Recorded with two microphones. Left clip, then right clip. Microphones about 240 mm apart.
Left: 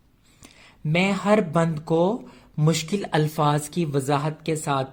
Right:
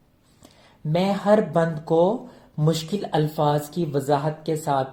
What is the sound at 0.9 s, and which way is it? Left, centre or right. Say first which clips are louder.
Speech: right 1 dB; left.